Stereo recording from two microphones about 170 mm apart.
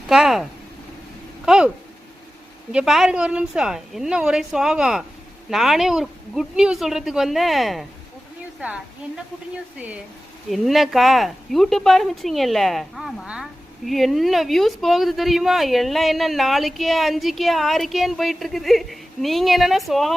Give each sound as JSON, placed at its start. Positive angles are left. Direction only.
{"t": 0.1, "sound": "a woman's voice", "side_deg": 0}
{"t": 1.5, "sound": "a woman's voice", "side_deg": -5}
{"t": 2.7, "sound": "a woman's voice", "side_deg": 0}